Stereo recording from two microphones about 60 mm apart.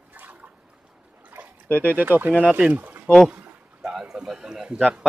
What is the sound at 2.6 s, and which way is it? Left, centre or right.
Speech, centre.